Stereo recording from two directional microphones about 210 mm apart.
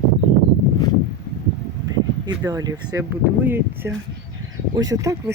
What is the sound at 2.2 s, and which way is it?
Speech, 15° right (ahead or behind).